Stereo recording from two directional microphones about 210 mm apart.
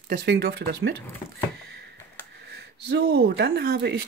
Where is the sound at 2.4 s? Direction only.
50° right (ahead or behind).